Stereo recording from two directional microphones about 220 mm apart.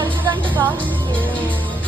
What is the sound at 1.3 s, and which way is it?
Music, 5° left (ahead or behind).